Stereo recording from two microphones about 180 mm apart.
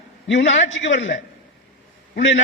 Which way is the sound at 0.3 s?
80° left.